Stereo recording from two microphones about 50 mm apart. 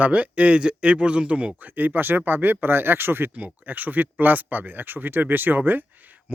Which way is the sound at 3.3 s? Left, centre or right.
Right.